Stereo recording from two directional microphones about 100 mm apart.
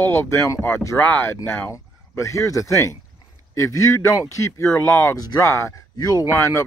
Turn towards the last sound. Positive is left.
turn(degrees=30)  # may be behind; listen again after turning